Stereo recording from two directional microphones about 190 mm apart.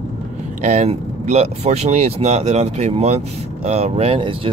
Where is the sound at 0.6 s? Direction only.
40° right (ahead or behind).